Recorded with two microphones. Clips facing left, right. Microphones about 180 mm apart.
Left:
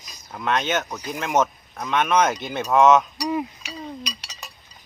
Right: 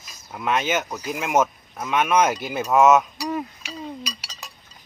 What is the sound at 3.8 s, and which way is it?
Chink, 5° right (ahead or behind).